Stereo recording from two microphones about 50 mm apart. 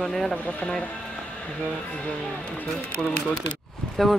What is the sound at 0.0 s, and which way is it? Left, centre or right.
Speech, centre.